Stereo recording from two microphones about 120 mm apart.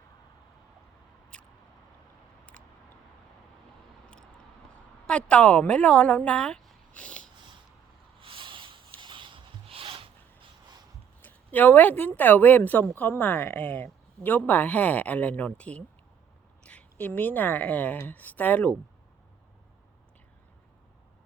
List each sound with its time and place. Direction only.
5.0 s a woman's voice: 10° left (ahead or behind)
8.2 s a sound: 45° right (ahead or behind)
9.0 s zipper: 40° right (ahead or behind)
11.2 s speech: 15° left (ahead or behind)